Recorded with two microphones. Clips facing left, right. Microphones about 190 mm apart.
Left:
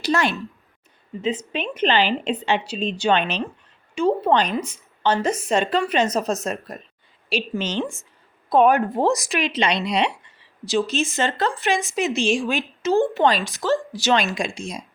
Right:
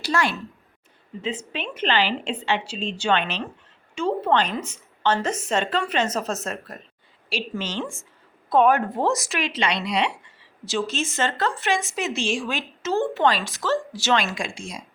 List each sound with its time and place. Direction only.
0.0 s a woman's voice: 20° left (ahead or behind)